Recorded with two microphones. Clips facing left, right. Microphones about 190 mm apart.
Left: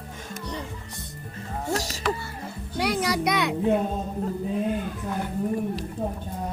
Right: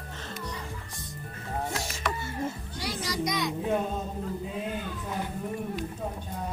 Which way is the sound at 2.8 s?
65° left (ahead or behind).